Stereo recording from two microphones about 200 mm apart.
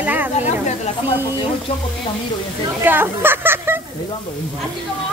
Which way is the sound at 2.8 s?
10° right (ahead or behind).